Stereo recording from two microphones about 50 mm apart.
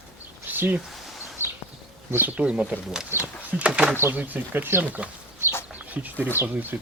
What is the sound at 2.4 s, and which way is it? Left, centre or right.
Speech, right.